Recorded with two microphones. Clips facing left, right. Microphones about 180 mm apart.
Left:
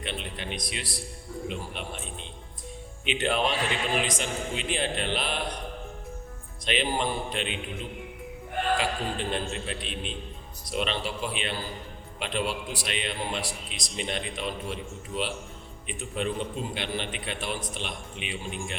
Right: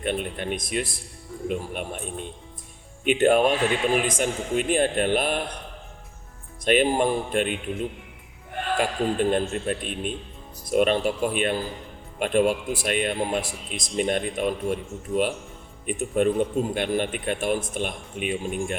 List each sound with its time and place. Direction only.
0.0 s a man's voice: 50° right (ahead or behind)
6.7 s a man's voice: 50° right (ahead or behind)
8.8 s a man's voice: 50° right (ahead or behind)